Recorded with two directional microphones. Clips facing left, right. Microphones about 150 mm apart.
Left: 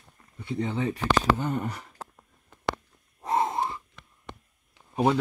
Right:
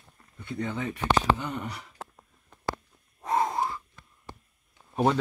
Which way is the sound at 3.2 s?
25° left (ahead or behind).